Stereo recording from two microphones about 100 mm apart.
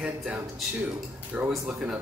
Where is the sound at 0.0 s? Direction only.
5° right (ahead or behind).